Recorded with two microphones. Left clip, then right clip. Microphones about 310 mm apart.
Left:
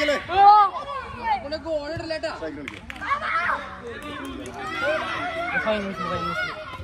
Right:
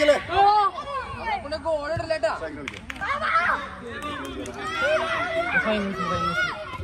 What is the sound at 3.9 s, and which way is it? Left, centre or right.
Speech, centre.